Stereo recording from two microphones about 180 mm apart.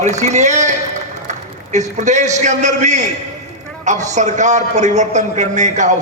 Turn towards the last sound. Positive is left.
turn(degrees=-40)  # may be behind; listen again after turning